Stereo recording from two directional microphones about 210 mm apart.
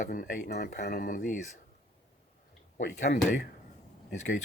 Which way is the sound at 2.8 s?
35° left (ahead or behind).